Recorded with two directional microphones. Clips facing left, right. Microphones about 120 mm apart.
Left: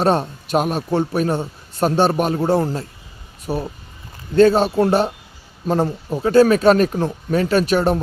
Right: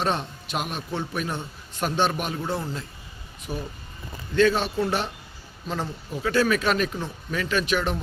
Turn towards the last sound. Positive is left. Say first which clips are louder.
# left 8 dB
turn(degrees=40)  # may be behind; listen again after turning